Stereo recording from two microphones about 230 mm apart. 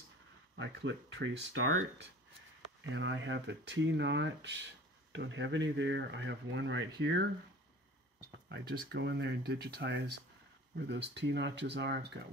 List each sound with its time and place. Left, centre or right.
0.6 s speech: right
8.5 s speech: right